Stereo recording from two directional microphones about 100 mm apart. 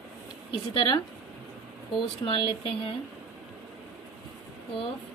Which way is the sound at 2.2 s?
60° left (ahead or behind).